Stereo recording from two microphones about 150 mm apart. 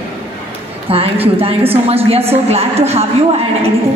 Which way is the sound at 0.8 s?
40° right (ahead or behind).